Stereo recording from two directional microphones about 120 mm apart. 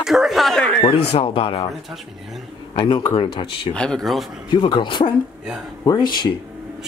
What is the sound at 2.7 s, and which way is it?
Speech, 45° left (ahead or behind).